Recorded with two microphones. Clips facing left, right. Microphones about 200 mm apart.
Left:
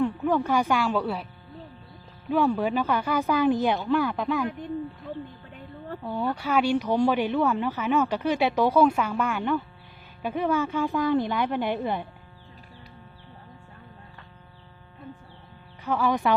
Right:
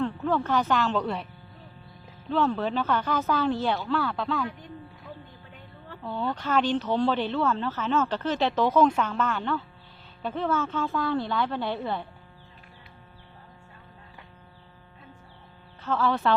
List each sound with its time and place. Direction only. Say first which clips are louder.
0.0 s speech: left 3 dB; 15° left (ahead or behind)
2.3 s speech: left 2 dB; 10° left (ahead or behind)
6.0 s speech: left 1 dB; 15° left (ahead or behind)
15.8 s speech: left 1 dB; 15° left (ahead or behind)